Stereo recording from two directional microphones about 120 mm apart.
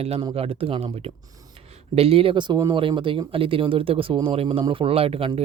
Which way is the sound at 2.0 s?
55° right (ahead or behind).